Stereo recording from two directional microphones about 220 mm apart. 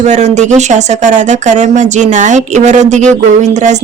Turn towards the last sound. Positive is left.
turn(degrees=-30)  # may be behind; listen again after turning